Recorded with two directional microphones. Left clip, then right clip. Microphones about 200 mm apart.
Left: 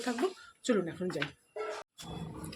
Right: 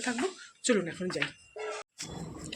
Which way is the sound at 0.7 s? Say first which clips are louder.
Right 2 dB; 5° left (ahead or behind).